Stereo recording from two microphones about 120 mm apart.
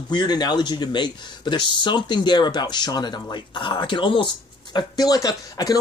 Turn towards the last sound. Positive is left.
turn(degrees=30)  # may be behind; listen again after turning